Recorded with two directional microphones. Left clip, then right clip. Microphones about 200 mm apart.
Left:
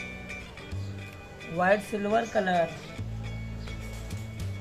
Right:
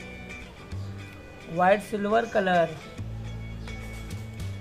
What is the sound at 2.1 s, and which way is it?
Speech, 35° right (ahead or behind).